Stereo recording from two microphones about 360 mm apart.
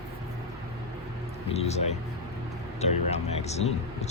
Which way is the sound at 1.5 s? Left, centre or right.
Centre.